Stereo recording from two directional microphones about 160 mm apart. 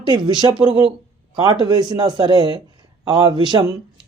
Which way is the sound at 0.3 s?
25° right (ahead or behind).